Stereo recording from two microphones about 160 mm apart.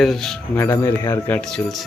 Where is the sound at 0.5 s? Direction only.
15° left (ahead or behind).